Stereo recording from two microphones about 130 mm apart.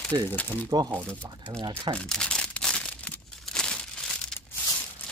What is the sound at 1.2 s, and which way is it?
Speech, 10° left (ahead or behind).